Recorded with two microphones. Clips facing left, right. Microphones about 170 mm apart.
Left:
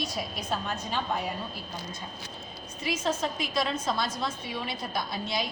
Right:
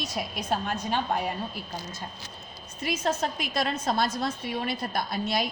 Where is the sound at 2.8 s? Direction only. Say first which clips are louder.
Right 1 dB; 55° right (ahead or behind).